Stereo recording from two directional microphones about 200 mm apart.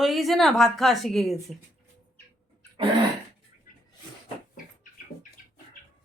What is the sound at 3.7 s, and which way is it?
Cat, 40° left (ahead or behind).